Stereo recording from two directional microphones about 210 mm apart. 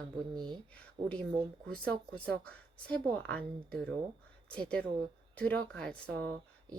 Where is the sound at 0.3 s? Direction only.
20° right (ahead or behind).